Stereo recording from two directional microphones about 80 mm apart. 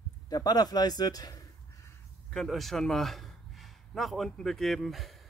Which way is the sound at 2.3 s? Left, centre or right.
Centre.